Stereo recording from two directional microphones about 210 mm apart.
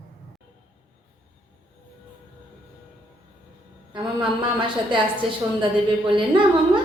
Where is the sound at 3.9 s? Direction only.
20° right (ahead or behind).